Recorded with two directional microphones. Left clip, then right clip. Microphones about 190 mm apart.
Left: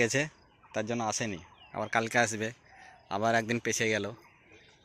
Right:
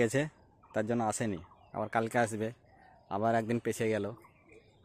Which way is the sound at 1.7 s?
15° right (ahead or behind).